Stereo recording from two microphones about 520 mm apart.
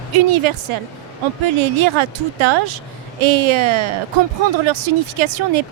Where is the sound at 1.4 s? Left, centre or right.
Right.